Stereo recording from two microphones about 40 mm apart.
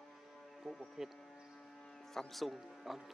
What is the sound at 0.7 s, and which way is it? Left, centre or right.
Speech, centre.